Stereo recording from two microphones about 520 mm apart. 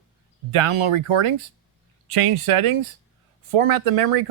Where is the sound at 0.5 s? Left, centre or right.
Right.